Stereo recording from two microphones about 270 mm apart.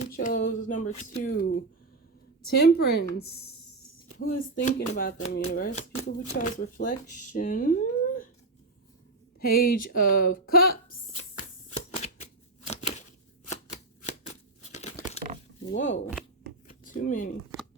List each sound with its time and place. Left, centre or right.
0.0 s a woman's voice: left
9.4 s a woman's voice: left
11.2 s shuffling cards: left
12.6 s a sound: left
14.6 s crumpling: left
16.6 s a sound: left